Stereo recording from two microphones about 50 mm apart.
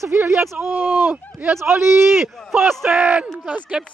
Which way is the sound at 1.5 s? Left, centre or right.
Right.